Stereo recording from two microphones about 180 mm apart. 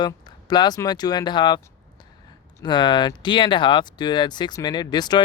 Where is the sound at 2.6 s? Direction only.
25° left (ahead or behind).